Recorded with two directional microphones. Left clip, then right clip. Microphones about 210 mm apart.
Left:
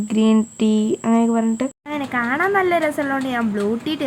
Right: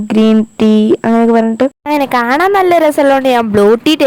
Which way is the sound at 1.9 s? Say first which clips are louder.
Right 10 dB; 50° right (ahead or behind).